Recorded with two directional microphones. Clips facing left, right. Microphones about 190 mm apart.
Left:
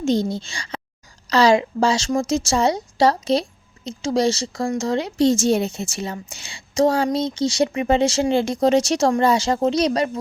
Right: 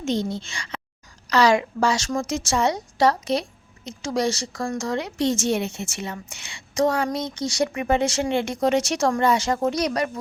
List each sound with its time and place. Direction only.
0.0 s a woman's voice: 35° left (ahead or behind)